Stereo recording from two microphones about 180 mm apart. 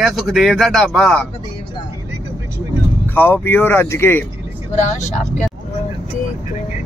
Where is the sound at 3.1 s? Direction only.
10° left (ahead or behind).